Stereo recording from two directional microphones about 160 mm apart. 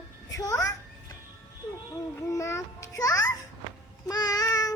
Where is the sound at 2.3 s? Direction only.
20° left (ahead or behind).